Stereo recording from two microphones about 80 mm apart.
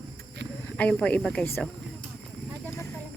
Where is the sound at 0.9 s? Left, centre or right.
Centre.